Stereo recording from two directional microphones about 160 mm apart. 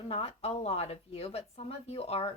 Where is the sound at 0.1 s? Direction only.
40° left (ahead or behind).